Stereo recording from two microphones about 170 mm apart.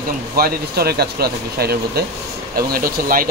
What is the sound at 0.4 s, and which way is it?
Speech, 65° right (ahead or behind).